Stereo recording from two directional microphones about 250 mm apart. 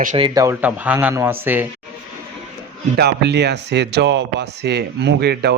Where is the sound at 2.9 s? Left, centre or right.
Right.